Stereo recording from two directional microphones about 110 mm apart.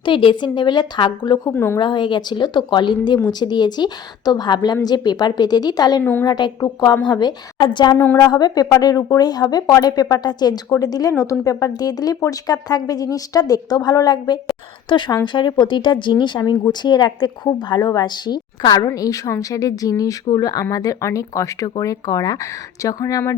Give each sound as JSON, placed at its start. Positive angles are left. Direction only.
{"t": 0.0, "sound": "speech", "side_deg": 50}
{"t": 1.5, "sound": "a woman's voice", "side_deg": 25}
{"t": 1.8, "sound": "speech", "side_deg": 45}
{"t": 6.0, "sound": "a woman's voice", "side_deg": 20}
{"t": 6.2, "sound": "speech", "side_deg": 40}
{"t": 7.9, "sound": "a woman's voice", "side_deg": 20}
{"t": 8.3, "sound": "speech", "side_deg": 40}